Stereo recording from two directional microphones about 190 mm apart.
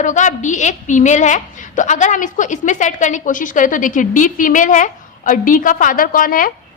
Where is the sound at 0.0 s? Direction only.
40° left (ahead or behind).